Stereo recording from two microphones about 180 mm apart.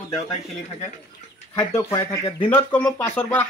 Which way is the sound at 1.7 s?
15° left (ahead or behind).